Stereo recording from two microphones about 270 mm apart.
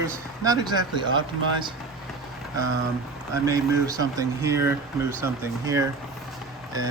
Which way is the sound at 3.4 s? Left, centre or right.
Centre.